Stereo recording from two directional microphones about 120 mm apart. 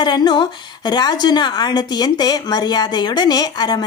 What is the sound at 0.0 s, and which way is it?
A woman's voice, 35° left (ahead or behind).